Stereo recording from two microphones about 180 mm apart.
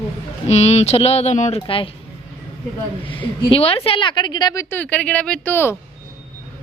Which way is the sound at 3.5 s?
30° left (ahead or behind).